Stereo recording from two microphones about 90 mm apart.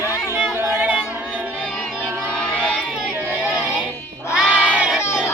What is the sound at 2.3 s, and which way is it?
Crowd, 10° left (ahead or behind).